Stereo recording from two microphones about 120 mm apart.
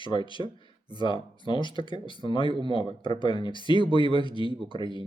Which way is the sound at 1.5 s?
45° left (ahead or behind).